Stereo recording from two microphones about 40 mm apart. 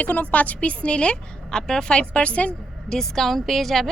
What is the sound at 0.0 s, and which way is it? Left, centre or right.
A woman's voice, left.